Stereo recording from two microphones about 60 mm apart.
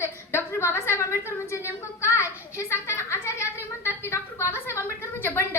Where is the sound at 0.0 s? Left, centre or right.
Left.